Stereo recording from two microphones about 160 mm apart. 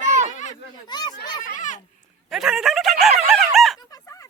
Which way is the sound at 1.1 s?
90° left.